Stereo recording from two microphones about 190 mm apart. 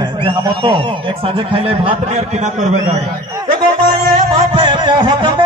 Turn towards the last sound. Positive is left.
turn(degrees=-25)  # may be behind; listen again after turning